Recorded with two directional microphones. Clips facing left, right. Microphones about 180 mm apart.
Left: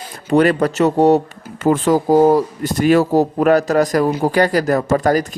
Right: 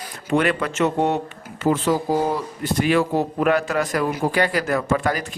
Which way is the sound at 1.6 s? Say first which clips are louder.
Left 5 dB; 50° left (ahead or behind).